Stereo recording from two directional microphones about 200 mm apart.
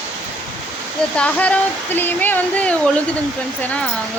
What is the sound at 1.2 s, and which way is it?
Speech, 5° left (ahead or behind).